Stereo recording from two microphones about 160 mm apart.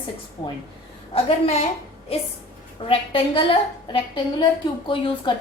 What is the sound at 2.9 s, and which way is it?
A woman's voice, 35° left (ahead or behind).